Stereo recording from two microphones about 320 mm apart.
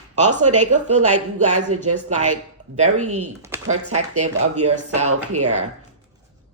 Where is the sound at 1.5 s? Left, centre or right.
Right.